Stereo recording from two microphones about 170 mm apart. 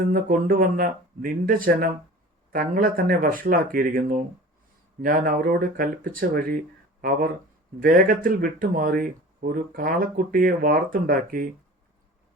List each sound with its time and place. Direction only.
0.1 s speech: 55° right (ahead or behind)
7.8 s speech: 55° right (ahead or behind)